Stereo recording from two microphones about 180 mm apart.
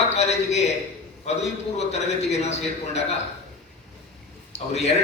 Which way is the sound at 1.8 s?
35° left (ahead or behind).